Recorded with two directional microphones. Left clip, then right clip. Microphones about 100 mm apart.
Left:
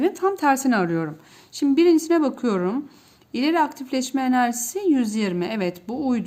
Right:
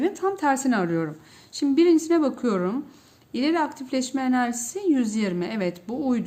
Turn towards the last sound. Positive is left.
turn(degrees=35)  # may be behind; listen again after turning